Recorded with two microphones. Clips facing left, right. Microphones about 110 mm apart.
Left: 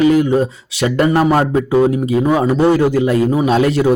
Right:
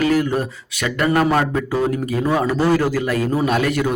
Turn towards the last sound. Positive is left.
turn(degrees=30)  # may be behind; listen again after turning